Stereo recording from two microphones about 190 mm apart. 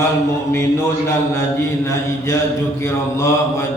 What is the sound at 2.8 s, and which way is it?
Mantra, 15° left (ahead or behind).